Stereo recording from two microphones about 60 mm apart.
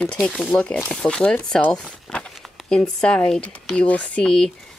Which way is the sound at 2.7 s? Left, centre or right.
Centre.